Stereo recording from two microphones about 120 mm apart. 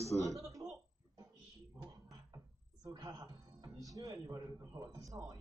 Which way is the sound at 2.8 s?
30° right (ahead or behind).